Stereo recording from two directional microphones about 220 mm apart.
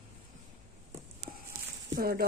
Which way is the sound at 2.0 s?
45° right (ahead or behind).